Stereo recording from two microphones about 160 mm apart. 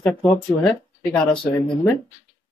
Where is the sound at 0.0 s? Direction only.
5° left (ahead or behind).